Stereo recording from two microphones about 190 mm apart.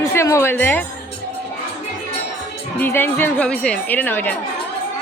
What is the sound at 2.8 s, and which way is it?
Speech, 10° left (ahead or behind).